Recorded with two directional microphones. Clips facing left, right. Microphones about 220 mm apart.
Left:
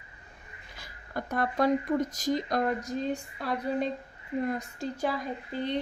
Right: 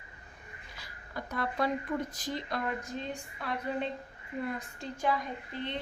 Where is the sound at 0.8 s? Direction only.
50° left (ahead or behind).